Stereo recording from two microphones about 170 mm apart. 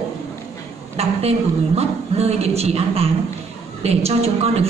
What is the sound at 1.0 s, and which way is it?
A woman's voice, 40° right (ahead or behind).